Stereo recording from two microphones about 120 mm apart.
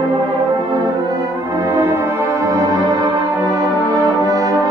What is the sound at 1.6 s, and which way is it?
Music, 20° right (ahead or behind).